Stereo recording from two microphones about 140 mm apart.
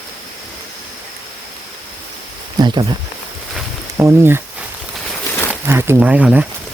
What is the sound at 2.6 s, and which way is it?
Speech, 30° right (ahead or behind).